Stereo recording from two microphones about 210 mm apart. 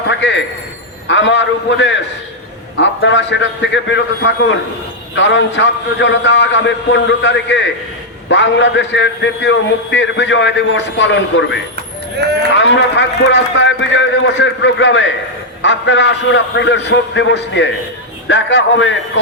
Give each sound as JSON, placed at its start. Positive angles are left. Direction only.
{"t": 0.1, "sound": "a man's voice", "side_deg": 60}
{"t": 3.0, "sound": "a man's voice", "side_deg": 60}
{"t": 12.2, "sound": "speech", "side_deg": -55}
{"t": 12.5, "sound": "a man's voice", "side_deg": 60}